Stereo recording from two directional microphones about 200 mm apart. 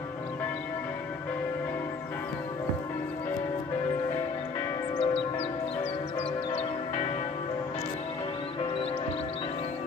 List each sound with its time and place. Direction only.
4.9 s church bell: 30° left (ahead or behind)
6.6 s church bell: 35° left (ahead or behind)